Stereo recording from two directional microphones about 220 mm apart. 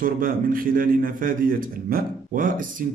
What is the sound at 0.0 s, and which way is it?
A man's voice, 40° right (ahead or behind).